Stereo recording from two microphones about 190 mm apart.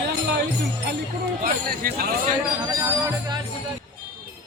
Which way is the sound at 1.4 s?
50° right (ahead or behind).